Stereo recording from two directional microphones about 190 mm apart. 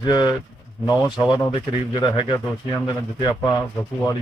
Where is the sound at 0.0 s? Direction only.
25° left (ahead or behind).